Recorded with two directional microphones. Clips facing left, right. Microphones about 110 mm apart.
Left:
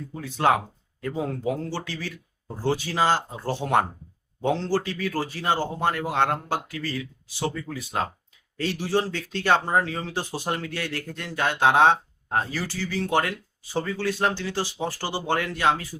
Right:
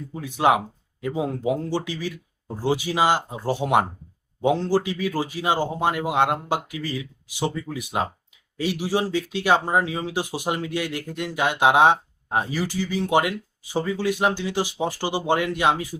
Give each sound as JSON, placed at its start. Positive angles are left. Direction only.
{"t": 0.1, "sound": "speech", "side_deg": -15}